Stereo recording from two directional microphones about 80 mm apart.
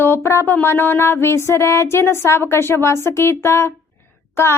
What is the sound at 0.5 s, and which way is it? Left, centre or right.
Speech, left.